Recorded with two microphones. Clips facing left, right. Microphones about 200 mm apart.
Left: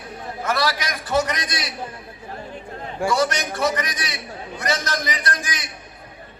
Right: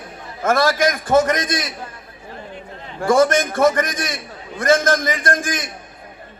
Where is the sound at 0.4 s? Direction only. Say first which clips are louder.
Right 8 dB; 50° right (ahead or behind).